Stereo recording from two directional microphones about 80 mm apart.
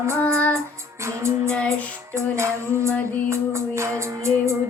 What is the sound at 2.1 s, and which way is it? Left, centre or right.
Music, right.